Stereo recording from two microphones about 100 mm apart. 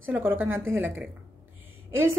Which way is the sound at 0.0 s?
20° right (ahead or behind).